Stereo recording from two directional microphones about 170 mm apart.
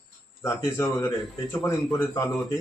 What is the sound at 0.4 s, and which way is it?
A man's voice, 15° left (ahead or behind).